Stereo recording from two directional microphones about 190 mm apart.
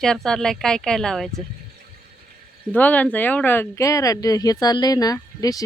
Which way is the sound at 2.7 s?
10° left (ahead or behind).